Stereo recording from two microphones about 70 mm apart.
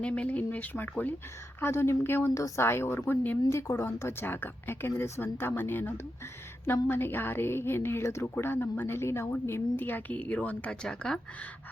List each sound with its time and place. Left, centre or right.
0.0 s speech: centre
4.9 s speech: left
10.8 s speech: centre